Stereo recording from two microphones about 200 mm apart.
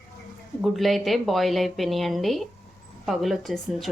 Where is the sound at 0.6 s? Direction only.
Centre (ahead or behind).